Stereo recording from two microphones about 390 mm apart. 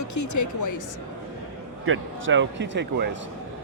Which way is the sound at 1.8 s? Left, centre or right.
Right.